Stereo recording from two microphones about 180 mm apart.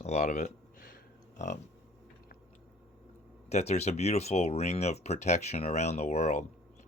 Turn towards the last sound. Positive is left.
turn(degrees=40)  # may be behind; listen again after turning